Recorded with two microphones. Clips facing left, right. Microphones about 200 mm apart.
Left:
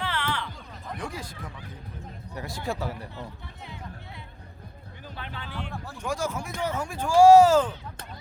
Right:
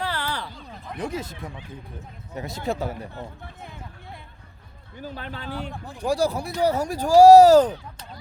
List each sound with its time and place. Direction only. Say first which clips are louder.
0.0 s a sound: right 1 dB; 40° right (ahead or behind)
0.9 s speech: right 8 dB; 20° right (ahead or behind)
3.6 s music: left 3 dB; 50° right (ahead or behind)
4.9 s speech: right 6 dB; 40° right (ahead or behind)
5.7 s speech: even; 15° right (ahead or behind)
6.0 s speech: right 7 dB; 35° right (ahead or behind)